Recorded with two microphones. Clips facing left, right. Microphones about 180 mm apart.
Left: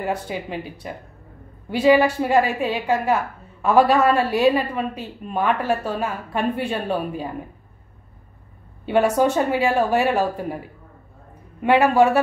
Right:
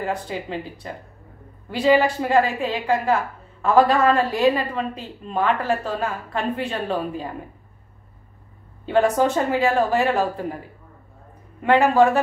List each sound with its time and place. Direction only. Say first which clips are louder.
0.0 s a woman's voice: left 1 dB; 10° left (ahead or behind)
1.7 s a woman's voice: left 2 dB; 10° left (ahead or behind)
8.8 s a woman's voice: left 1 dB; 10° left (ahead or behind)
11.6 s a woman's voice: even; 10° left (ahead or behind)